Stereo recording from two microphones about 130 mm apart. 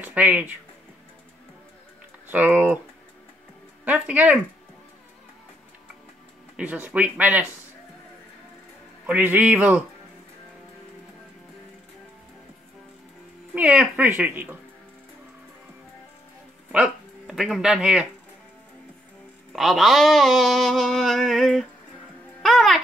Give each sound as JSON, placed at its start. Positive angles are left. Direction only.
{"t": 0.0, "sound": "speech", "side_deg": -10}
{"t": 2.2, "sound": "speech", "side_deg": -10}
{"t": 3.8, "sound": "speech", "side_deg": -10}
{"t": 6.5, "sound": "speech", "side_deg": -10}
{"t": 9.0, "sound": "speech", "side_deg": -15}
{"t": 13.6, "sound": "speech", "side_deg": -10}
{"t": 16.7, "sound": "speech", "side_deg": -5}
{"t": 19.5, "sound": "a sound", "side_deg": 0}
{"t": 22.4, "sound": "a child's voice", "side_deg": 5}